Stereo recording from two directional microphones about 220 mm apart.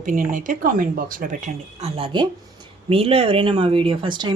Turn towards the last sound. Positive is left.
turn(degrees=-20)  # may be behind; listen again after turning